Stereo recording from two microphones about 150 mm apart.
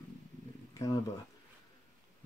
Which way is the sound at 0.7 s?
25° left (ahead or behind).